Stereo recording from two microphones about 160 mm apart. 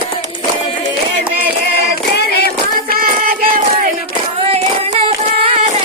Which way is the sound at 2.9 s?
65° right (ahead or behind).